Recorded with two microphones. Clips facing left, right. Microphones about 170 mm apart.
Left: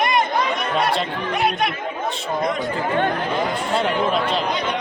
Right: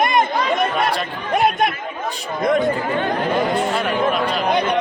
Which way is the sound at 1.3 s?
50° right (ahead or behind).